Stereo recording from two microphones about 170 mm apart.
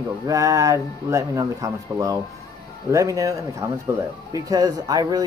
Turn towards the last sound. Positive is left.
turn(degrees=-20)  # may be behind; listen again after turning